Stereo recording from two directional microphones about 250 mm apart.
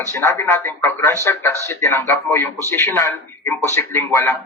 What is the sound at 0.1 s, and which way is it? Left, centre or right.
Speech, centre.